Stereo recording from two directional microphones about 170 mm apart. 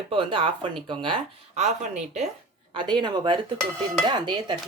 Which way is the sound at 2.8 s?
30° right (ahead or behind).